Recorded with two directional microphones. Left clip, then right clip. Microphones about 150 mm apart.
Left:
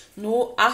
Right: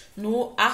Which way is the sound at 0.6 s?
15° left (ahead or behind).